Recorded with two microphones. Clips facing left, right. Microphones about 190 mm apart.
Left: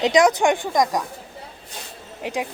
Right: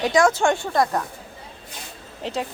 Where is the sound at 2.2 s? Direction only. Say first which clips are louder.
Left 1 dB; 15° left (ahead or behind).